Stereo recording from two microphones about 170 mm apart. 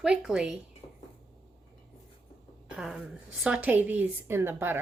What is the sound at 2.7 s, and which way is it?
A woman's voice, 5° right (ahead or behind).